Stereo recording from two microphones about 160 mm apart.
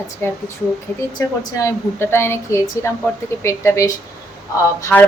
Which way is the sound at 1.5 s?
15° left (ahead or behind).